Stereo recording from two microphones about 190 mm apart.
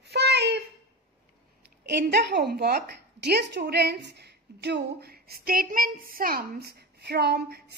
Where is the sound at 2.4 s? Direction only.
55° right (ahead or behind).